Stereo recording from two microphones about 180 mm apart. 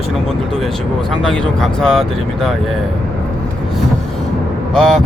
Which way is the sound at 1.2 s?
5° left (ahead or behind).